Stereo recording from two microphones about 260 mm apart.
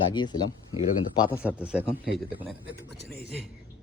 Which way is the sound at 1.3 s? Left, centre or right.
Centre.